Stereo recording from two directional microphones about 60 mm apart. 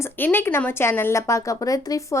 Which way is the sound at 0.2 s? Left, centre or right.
Left.